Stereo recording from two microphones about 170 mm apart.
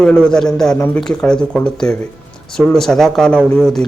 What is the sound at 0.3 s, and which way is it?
Speech, 5° left (ahead or behind).